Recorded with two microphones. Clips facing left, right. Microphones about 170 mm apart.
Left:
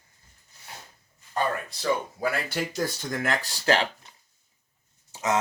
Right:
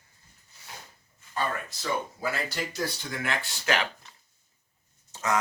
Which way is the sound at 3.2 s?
35° left (ahead or behind).